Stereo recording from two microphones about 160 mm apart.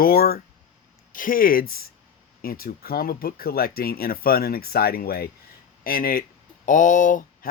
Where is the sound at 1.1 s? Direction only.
60° left (ahead or behind).